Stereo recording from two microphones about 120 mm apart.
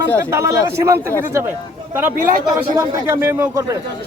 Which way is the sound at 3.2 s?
20° right (ahead or behind).